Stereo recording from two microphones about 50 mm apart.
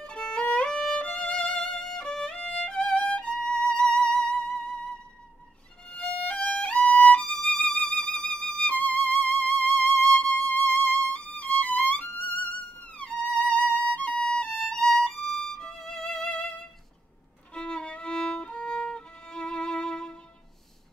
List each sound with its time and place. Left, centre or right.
0.0 s violin: centre
3.1 s music: centre
5.9 s violin: left
8.7 s music: left
14.8 s violin: centre
15.4 s violin: centre
17.6 s violin: centre